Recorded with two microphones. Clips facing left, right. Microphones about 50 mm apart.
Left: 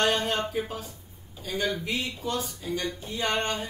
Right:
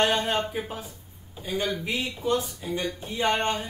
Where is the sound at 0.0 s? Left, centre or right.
Right.